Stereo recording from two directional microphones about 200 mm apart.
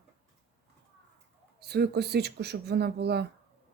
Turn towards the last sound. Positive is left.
turn(degrees=-55)  # may be behind; listen again after turning